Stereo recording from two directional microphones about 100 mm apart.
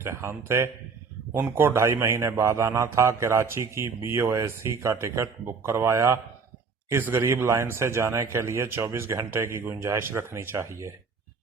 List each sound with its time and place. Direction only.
0.0 s a man's voice: 25° right (ahead or behind)